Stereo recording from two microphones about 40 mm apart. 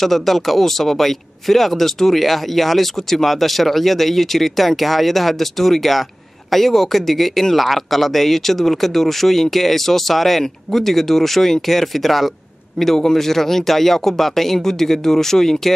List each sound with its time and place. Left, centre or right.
0.0 s a man's voice: centre